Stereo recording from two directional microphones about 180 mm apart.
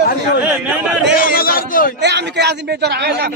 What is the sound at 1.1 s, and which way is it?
Speech, 55° left (ahead or behind).